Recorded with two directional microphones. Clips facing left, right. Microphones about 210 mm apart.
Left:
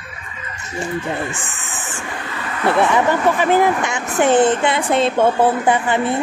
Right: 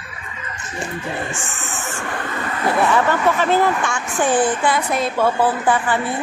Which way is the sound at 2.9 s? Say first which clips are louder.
Left 1 dB; 15° left (ahead or behind).